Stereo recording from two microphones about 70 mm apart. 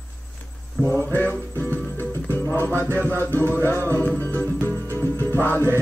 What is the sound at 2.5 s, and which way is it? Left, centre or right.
Music, left.